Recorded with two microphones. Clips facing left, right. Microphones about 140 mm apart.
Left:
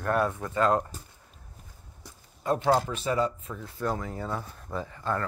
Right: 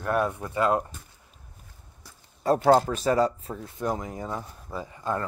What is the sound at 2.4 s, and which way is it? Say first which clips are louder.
Speech: right 5 dB; 40° right (ahead or behind).